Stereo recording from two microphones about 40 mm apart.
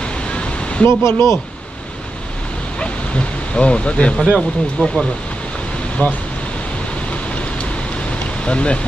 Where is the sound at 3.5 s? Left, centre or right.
Left.